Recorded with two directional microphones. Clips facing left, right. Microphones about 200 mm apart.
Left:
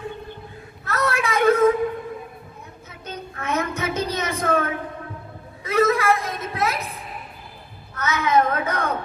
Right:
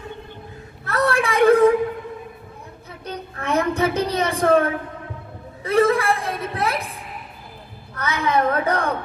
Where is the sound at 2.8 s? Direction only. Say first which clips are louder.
Right 3 dB; 35° right (ahead or behind).